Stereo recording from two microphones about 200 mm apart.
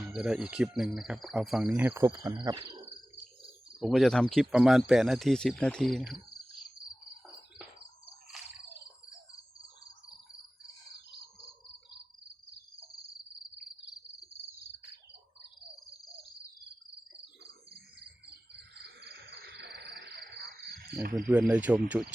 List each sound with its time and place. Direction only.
0.1 s speech: 5° right (ahead or behind)
2.0 s insect: 20° right (ahead or behind)
3.8 s speech: centre (ahead or behind)
18.8 s a sound: 55° right (ahead or behind)
21.2 s speech: 5° right (ahead or behind)